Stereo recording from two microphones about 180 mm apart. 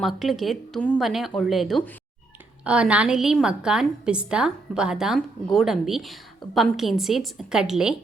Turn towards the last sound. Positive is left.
turn(degrees=-5)  # may be behind; listen again after turning